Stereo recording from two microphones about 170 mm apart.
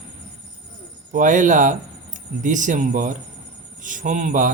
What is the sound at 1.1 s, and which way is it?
A man's voice, 50° right (ahead or behind).